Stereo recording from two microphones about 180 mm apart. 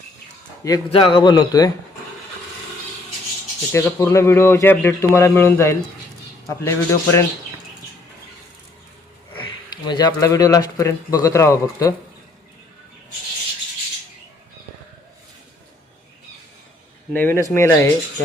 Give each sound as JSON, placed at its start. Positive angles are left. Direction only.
{"t": 0.9, "sound": "a man's voice", "side_deg": 30}
{"t": 3.7, "sound": "a man's voice", "side_deg": 15}
{"t": 9.3, "sound": "speech", "side_deg": 25}
{"t": 17.2, "sound": "a man's voice", "side_deg": 10}